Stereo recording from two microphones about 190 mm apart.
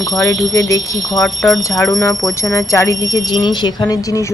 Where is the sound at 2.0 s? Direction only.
15° left (ahead or behind).